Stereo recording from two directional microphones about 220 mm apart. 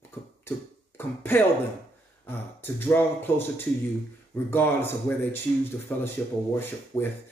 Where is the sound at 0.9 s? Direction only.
10° left (ahead or behind).